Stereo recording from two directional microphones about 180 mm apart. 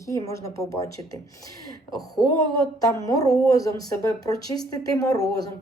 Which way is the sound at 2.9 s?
20° left (ahead or behind).